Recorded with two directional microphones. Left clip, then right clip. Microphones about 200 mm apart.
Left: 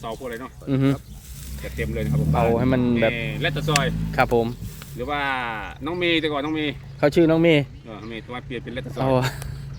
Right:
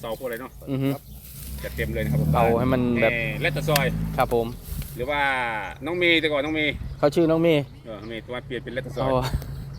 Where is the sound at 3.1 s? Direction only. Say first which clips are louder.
Right 1 dB; 60° left (ahead or behind).